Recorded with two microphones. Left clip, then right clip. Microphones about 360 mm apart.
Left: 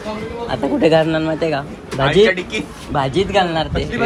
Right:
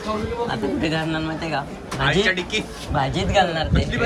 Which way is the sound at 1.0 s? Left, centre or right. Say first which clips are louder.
Left 8 dB; centre.